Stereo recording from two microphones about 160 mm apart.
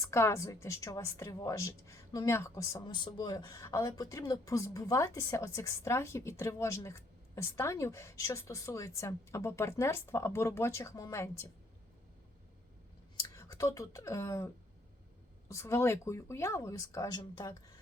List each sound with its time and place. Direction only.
0.0 s speech: 20° left (ahead or behind)
2.8 s speech: 30° left (ahead or behind)
13.2 s speech: 20° left (ahead or behind)